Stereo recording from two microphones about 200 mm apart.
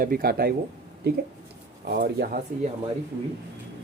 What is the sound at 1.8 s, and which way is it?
Speech, 50° right (ahead or behind).